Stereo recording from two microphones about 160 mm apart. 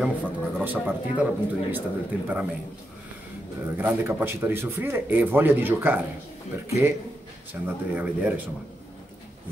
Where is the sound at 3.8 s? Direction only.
15° right (ahead or behind).